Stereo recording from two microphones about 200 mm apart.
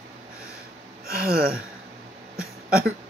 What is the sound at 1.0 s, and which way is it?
Speech, 50° right (ahead or behind).